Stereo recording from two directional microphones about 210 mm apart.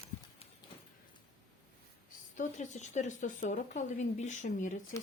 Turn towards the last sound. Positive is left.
turn(degrees=35)  # may be behind; listen again after turning